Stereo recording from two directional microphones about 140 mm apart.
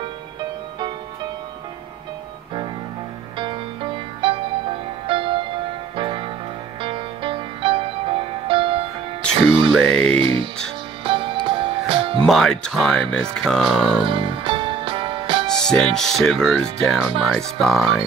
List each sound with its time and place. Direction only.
3.3 s music: 40° right (ahead or behind)
9.7 s speech: 5° left (ahead or behind)
10.2 s music: 40° right (ahead or behind)
12.3 s speech: 5° left (ahead or behind)
13.9 s music: 40° right (ahead or behind)
15.5 s speech: 5° left (ahead or behind)